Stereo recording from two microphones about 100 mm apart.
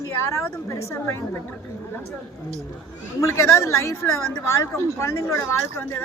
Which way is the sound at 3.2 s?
30° left (ahead or behind).